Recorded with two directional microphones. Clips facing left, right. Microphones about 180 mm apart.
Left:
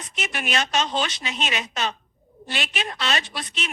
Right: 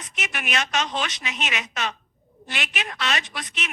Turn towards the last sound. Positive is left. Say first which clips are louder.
# left 2 dB
turn(degrees=30)  # may be behind; listen again after turning